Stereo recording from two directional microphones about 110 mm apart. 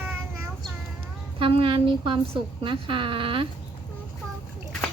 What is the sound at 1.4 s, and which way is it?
Speech, 50° right (ahead or behind).